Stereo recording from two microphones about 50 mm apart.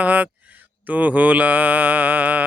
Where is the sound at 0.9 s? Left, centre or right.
Right.